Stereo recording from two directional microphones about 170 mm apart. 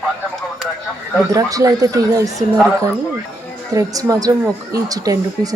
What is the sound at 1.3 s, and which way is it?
Speech, 20° right (ahead or behind).